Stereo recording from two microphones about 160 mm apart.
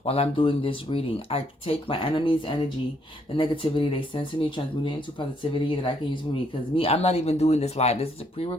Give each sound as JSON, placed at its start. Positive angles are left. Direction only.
{"t": 0.0, "sound": "speech", "side_deg": 35}